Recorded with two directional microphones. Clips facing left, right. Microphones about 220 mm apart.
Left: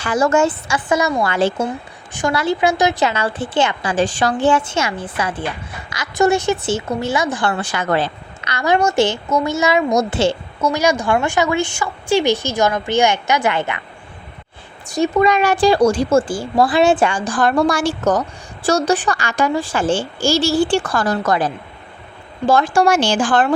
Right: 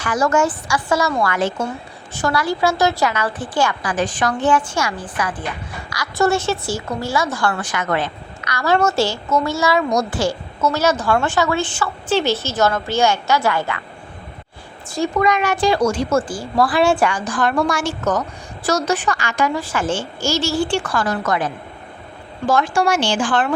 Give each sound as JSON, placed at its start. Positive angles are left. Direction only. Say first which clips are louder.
{"t": 0.0, "sound": "a woman's voice", "louder": "left 2 dB", "side_deg": 25}
{"t": 7.5, "sound": "a woman's voice", "louder": "left 3 dB", "side_deg": 30}
{"t": 10.6, "sound": "a woman's voice", "louder": "left 1 dB", "side_deg": 15}
{"t": 14.9, "sound": "a woman's voice", "louder": "left 3 dB", "side_deg": 20}